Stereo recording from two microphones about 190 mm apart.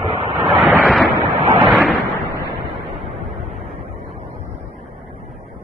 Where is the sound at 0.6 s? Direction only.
5° left (ahead or behind).